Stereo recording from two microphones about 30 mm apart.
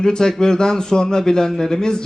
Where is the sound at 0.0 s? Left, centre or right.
Left.